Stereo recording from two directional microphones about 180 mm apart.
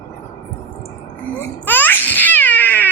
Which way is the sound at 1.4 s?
10° left (ahead or behind).